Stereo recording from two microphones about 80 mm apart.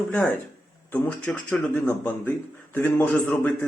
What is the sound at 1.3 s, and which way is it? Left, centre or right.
Speech, centre.